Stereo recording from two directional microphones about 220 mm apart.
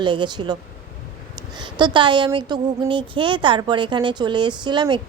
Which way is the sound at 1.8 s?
20° right (ahead or behind).